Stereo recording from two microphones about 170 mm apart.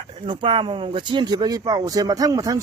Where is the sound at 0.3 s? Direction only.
30° right (ahead or behind).